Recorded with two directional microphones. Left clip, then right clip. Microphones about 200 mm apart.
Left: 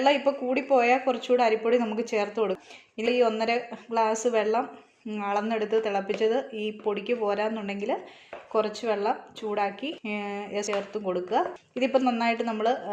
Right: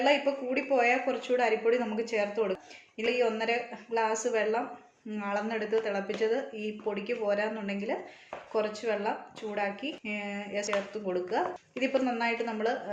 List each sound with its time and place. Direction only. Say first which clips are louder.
0.0 s a woman's voice: left 3 dB; 35° left (ahead or behind)